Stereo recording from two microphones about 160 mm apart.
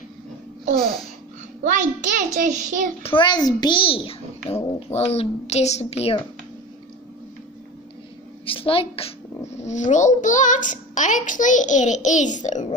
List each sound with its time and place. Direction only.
1.6 s a child's voice: 55° right (ahead or behind)
3.0 s a child's voice: 30° left (ahead or behind)
8.5 s a child's voice: 35° left (ahead or behind)
9.6 s a child's voice: 50° left (ahead or behind)